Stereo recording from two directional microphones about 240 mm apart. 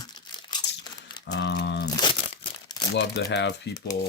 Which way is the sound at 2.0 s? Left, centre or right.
Left.